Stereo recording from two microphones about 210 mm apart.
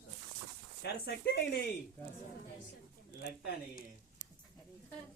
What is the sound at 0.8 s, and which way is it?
Speech, 50° left (ahead or behind).